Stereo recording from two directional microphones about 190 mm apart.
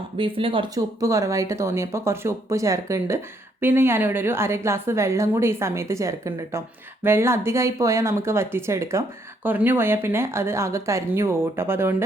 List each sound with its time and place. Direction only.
0.2 s speech: 30° right (ahead or behind); by 12.0 s 10° right (ahead or behind)